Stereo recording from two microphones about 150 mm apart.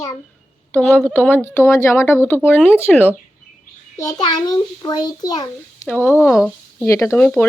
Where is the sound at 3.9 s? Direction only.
25° left (ahead or behind).